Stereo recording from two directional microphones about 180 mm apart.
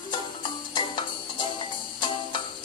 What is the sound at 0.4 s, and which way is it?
Music, 25° left (ahead or behind).